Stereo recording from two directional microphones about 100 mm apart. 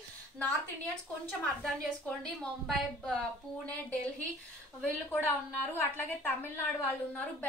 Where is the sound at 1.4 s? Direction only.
5° left (ahead or behind).